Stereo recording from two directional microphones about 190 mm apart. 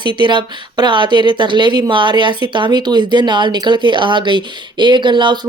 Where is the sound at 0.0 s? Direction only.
25° right (ahead or behind).